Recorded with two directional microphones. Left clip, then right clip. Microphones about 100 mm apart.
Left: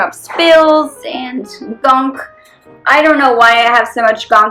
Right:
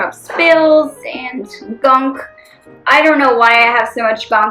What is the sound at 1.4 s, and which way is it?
Speech, 45° left (ahead or behind).